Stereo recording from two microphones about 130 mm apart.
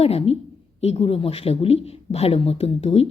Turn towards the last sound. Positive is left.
turn(degrees=50)  # may be behind; listen again after turning